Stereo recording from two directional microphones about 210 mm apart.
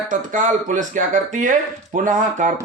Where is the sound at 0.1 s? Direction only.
35° right (ahead or behind).